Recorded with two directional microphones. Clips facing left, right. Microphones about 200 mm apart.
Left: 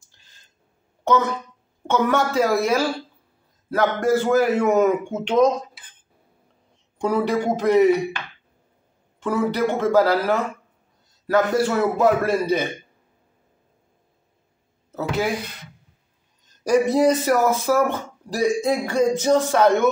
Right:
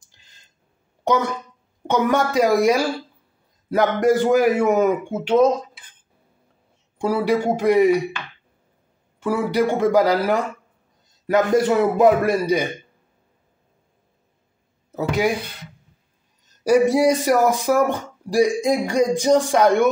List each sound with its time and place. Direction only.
1.0 s speech: 15° right (ahead or behind)
7.0 s speech: 10° right (ahead or behind)
9.2 s speech: 10° right (ahead or behind)
15.0 s speech: 15° right (ahead or behind)
16.6 s speech: 10° right (ahead or behind)